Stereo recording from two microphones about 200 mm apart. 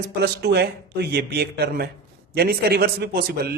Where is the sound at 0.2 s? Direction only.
55° right (ahead or behind).